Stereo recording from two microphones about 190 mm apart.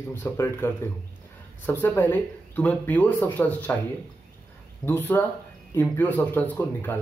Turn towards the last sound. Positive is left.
turn(degrees=10)  # may be behind; listen again after turning